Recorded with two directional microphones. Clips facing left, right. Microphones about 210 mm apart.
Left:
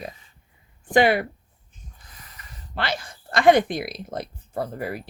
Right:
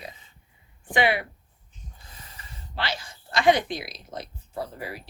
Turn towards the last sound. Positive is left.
turn(degrees=50)  # may be behind; listen again after turning